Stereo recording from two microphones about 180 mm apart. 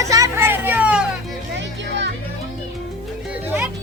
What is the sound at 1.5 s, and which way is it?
Music, 80° right.